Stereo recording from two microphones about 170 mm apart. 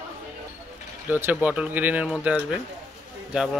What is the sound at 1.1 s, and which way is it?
Speech, 10° right (ahead or behind).